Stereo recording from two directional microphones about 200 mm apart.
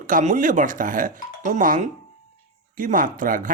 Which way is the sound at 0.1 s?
40° right (ahead or behind).